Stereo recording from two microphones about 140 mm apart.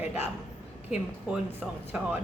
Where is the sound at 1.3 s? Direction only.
10° right (ahead or behind).